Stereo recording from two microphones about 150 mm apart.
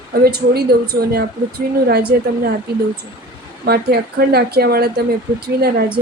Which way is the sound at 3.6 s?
90° right.